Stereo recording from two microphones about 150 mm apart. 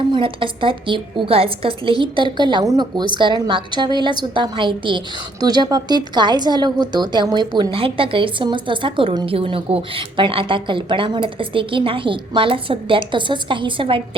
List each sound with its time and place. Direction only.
0.1 s a woman's voice: 35° right (ahead or behind)